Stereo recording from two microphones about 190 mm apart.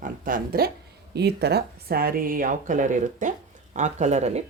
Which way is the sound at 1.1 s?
60° right (ahead or behind).